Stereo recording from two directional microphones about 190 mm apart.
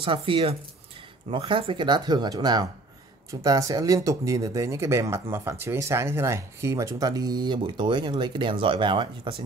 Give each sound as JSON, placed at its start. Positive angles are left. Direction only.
{"t": 0.0, "sound": "speech", "side_deg": -25}